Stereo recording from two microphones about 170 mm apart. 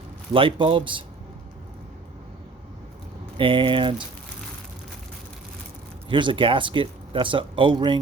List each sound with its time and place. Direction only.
0.3 s a man's voice: 30° right (ahead or behind)
3.3 s speech: 30° right (ahead or behind)
6.1 s speech: 30° right (ahead or behind)